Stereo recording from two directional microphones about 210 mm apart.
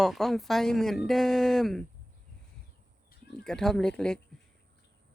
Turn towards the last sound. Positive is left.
turn(degrees=5)  # may be behind; listen again after turning